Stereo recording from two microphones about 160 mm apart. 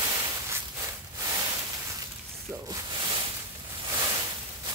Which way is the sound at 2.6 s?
25° right (ahead or behind).